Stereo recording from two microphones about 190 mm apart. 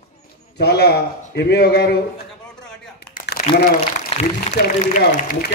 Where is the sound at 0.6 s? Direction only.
60° left (ahead or behind).